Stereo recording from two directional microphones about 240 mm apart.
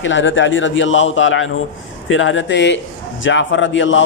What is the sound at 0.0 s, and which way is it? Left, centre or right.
A man's voice, left.